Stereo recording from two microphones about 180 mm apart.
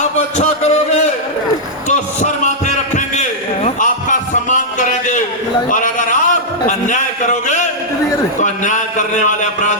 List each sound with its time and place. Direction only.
0.3 s a sound: 40° left (ahead or behind)
6.7 s a man's voice: 45° left (ahead or behind)
8.4 s a man's voice: 40° left (ahead or behind)